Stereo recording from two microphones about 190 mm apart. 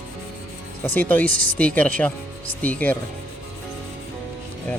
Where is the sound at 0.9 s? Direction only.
10° left (ahead or behind).